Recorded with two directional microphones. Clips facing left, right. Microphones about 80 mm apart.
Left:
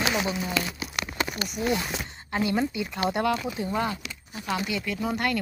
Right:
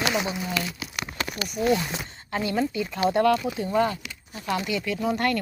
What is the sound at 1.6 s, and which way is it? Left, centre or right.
Speech, centre.